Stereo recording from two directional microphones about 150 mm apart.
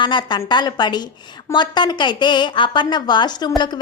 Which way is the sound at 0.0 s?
30° left (ahead or behind).